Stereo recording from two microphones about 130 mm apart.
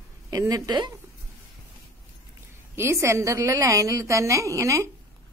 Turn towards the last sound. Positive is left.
turn(degrees=-20)  # may be behind; listen again after turning